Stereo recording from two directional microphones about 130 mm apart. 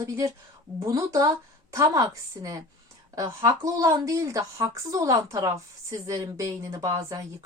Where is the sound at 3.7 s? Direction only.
25° right (ahead or behind).